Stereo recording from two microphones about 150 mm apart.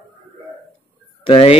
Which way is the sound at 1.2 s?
40° left (ahead or behind).